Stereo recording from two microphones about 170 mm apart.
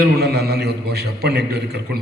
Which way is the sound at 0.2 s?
70° right (ahead or behind).